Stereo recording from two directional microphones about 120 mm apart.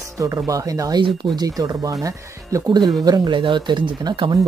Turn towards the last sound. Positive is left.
turn(degrees=-35)  # may be behind; listen again after turning